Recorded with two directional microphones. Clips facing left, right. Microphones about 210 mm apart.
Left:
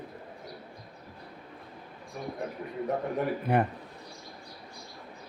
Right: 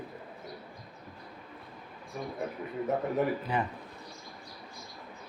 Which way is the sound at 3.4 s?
60° left (ahead or behind).